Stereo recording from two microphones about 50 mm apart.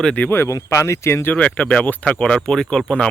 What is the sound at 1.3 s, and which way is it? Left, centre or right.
Speech, left.